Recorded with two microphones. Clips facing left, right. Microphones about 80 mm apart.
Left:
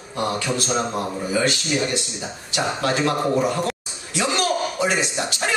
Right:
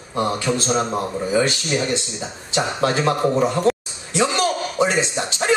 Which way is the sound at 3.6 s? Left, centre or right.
Right.